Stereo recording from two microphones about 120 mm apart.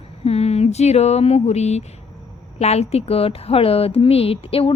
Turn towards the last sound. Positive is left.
turn(degrees=55)  # may be behind; listen again after turning